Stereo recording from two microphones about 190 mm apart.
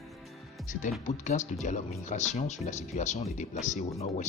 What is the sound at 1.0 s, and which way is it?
Speech, 40° left (ahead or behind).